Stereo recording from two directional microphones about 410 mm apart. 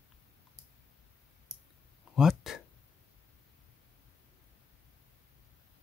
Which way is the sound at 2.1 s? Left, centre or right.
Centre.